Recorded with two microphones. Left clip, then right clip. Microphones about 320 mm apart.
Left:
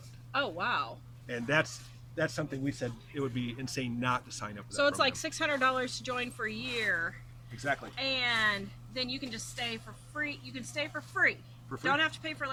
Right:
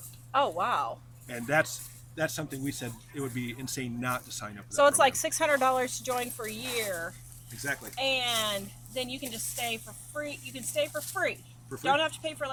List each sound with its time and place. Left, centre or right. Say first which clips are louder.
0.3 s speech: right 5 dB; centre
1.3 s a man's voice: right 2 dB; centre
4.8 s speech: right 6 dB; right
7.5 s speech: left 1 dB; centre
7.9 s a man's voice: right 4 dB; centre